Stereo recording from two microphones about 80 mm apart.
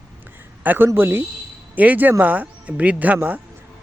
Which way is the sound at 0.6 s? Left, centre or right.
Right.